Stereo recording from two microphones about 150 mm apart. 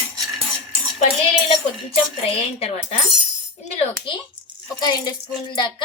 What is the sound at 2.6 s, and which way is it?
Speech, 45° left (ahead or behind).